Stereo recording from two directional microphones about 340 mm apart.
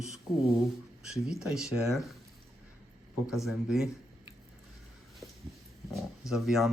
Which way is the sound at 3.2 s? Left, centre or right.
Centre.